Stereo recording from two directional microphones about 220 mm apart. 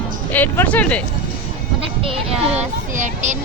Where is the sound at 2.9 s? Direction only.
35° right (ahead or behind).